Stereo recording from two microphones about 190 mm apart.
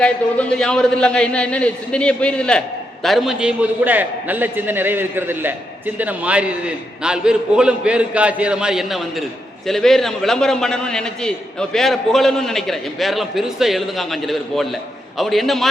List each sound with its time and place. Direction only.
0.0 s a man's voice: 5° left (ahead or behind)